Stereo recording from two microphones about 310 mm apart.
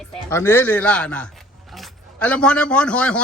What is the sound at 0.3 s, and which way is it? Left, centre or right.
A man's voice, centre.